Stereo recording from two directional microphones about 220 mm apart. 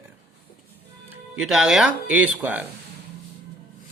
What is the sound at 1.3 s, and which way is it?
Speech, centre (ahead or behind).